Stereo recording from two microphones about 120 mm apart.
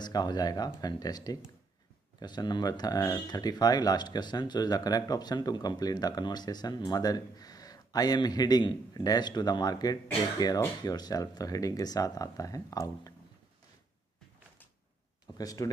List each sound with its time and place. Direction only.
0.0 s speech: 35° left (ahead or behind)
15.3 s speech: 30° left (ahead or behind)